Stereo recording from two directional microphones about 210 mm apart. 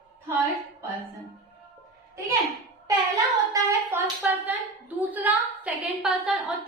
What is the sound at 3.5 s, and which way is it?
Hands, 10° right (ahead or behind).